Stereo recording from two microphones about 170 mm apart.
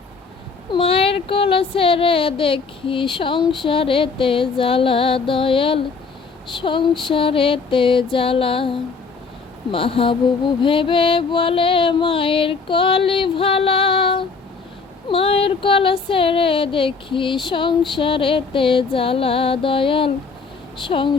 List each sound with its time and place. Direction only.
0.7 s speech: 30° left (ahead or behind)